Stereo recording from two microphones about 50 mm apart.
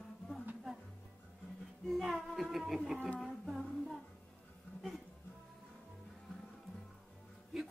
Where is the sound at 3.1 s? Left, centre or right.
Centre.